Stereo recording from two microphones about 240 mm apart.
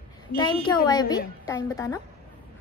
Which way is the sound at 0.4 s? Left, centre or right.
Centre.